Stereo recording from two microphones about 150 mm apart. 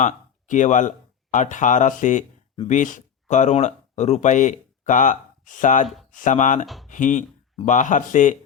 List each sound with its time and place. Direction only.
0.0 s speech: 55° left (ahead or behind)